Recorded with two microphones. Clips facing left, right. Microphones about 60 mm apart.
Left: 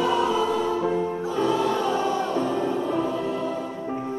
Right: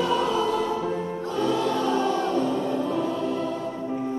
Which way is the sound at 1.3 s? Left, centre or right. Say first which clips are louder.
Left 1 dB; centre.